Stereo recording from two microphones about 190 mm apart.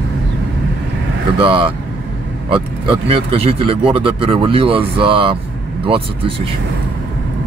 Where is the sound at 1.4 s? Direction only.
25° right (ahead or behind).